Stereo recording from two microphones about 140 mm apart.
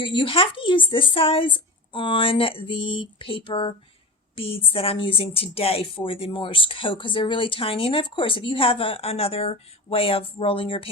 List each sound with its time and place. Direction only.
0.0 s a woman's voice: 35° left (ahead or behind)